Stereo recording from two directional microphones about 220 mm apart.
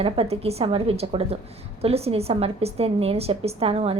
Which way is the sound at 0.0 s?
25° right (ahead or behind).